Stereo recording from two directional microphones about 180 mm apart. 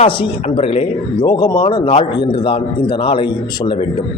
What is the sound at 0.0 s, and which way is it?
A man's voice, 30° left (ahead or behind).